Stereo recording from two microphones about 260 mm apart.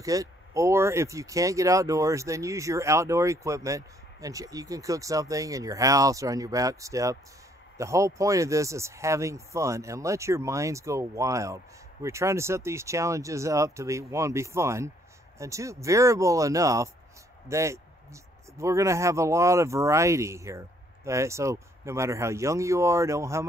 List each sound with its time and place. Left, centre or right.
0.0 s speech: centre